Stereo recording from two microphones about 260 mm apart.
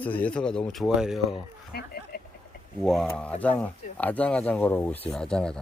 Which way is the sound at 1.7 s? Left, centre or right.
Left.